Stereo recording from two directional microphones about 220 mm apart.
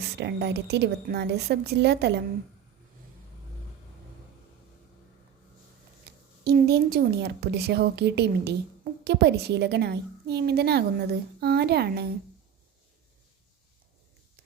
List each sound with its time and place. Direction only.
0.0 s a woman's voice: 50° right (ahead or behind)
6.1 s a woman's voice: 45° right (ahead or behind)